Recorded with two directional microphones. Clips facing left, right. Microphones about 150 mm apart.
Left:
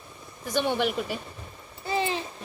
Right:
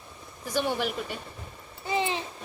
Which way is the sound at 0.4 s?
5° right (ahead or behind).